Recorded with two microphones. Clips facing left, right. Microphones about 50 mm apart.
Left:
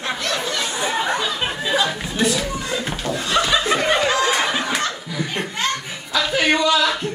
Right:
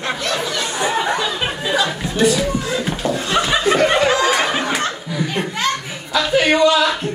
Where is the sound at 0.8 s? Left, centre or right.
Centre.